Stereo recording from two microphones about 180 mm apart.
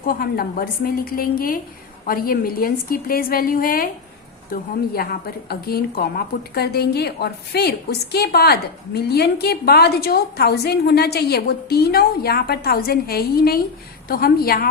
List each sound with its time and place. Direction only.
0.0 s a woman's voice: 55° left (ahead or behind)